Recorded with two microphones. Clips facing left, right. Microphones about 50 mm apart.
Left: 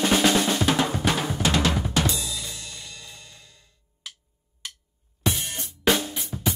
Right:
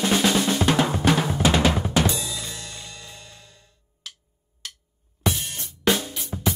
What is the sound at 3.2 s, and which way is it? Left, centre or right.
Music, right.